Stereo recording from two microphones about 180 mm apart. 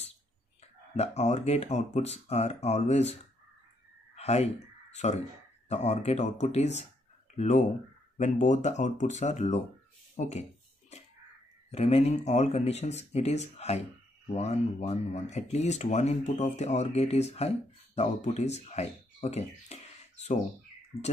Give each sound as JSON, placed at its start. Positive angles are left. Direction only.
{"t": 0.9, "sound": "speech", "side_deg": 40}
{"t": 11.7, "sound": "speech", "side_deg": 35}